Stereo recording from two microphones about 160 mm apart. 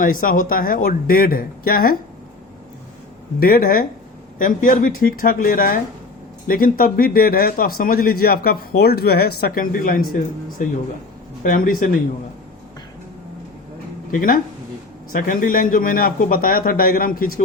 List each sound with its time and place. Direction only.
0.0 s a man's voice: 60° left (ahead or behind)
3.4 s a man's voice: 65° left (ahead or behind)
11.4 s a man's voice: 60° left (ahead or behind)
14.1 s a man's voice: 60° left (ahead or behind)